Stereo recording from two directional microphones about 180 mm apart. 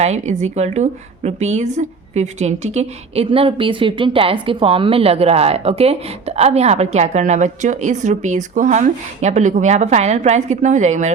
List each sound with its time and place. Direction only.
0.0 s a woman's voice: 40° right (ahead or behind)